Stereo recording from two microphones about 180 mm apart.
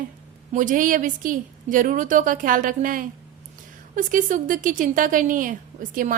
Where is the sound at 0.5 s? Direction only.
45° right (ahead or behind).